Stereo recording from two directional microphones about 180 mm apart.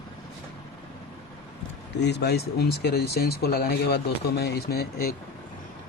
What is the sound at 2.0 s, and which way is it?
Speech, 65° left (ahead or behind).